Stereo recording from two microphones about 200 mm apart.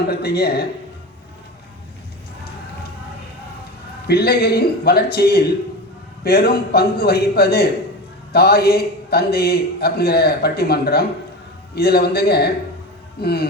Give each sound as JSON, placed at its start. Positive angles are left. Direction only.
{"t": 0.1, "sound": "a man's voice", "side_deg": 50}
{"t": 4.0, "sound": "a man's voice", "side_deg": 50}